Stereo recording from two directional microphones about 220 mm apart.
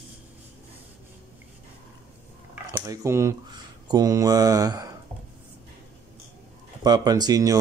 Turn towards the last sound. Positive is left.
turn(degrees=-15)  # may be behind; listen again after turning